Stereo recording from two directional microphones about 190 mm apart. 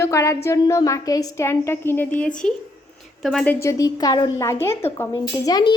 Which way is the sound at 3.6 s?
15° left (ahead or behind).